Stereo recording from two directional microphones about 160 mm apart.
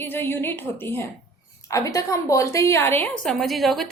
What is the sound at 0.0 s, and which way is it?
A woman's voice, 15° left (ahead or behind).